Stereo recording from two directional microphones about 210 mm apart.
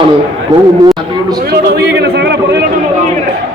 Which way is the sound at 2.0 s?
50° right (ahead or behind).